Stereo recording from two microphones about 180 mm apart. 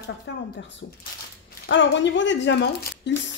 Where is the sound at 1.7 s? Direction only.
90° left; by 3.2 s 70° left (ahead or behind).